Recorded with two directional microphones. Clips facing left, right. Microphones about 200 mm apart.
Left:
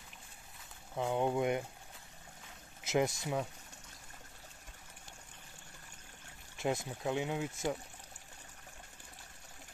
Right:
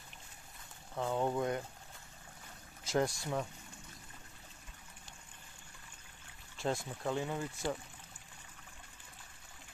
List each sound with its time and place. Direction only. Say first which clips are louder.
0.9 s a sound: left 1 dB; 15° left (ahead or behind)
2.9 s speech: left 1 dB; 20° left (ahead or behind)
6.6 s speech: left 1 dB; 20° left (ahead or behind)